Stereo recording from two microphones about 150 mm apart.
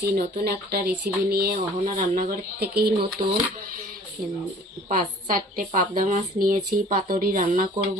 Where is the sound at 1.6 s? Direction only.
60° right (ahead or behind); by 2.9 s 80° right.